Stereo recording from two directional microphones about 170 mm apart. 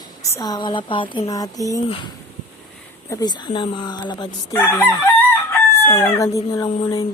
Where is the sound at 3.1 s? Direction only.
25° left (ahead or behind).